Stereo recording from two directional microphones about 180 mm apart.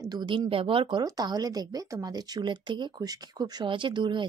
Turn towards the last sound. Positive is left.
turn(degrees=-25)  # may be behind; listen again after turning